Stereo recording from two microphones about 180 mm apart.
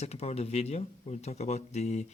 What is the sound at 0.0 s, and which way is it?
Speech, 35° left (ahead or behind).